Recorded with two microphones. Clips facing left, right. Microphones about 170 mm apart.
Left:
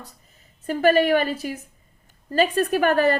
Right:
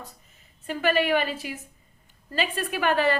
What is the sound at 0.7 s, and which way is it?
A woman's voice, 40° left (ahead or behind).